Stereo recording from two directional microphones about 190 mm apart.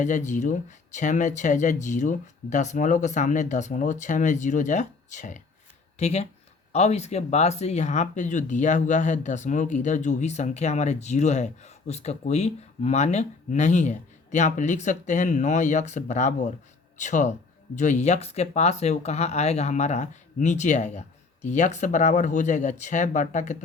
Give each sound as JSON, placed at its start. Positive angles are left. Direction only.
{"t": 0.0, "sound": "speech", "side_deg": 40}